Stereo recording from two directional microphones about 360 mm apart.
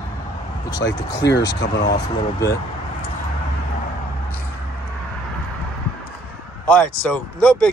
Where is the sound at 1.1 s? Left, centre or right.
Left.